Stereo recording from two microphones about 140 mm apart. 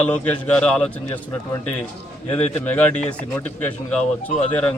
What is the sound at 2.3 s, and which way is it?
Speech, 10° left (ahead or behind).